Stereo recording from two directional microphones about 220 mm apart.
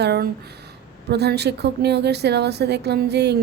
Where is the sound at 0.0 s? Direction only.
45° right (ahead or behind).